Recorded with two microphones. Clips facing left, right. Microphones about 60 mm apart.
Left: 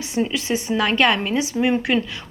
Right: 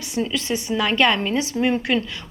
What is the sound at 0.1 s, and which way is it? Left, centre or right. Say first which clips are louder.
A woman's voice: left 1 dB; left.